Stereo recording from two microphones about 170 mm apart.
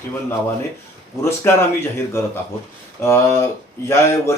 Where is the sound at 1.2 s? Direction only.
15° left (ahead or behind).